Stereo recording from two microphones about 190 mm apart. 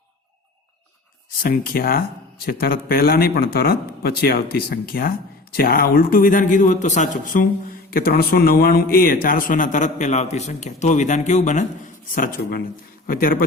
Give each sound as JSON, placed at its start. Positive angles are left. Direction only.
{"t": 1.4, "sound": "a man's voice", "side_deg": 50}
{"t": 7.9, "sound": "a man's voice", "side_deg": 50}